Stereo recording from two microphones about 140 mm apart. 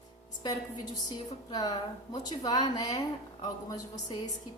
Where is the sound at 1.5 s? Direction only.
30° left (ahead or behind).